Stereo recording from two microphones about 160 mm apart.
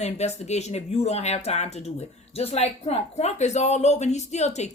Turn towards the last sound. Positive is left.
turn(degrees=45)  # may be behind; listen again after turning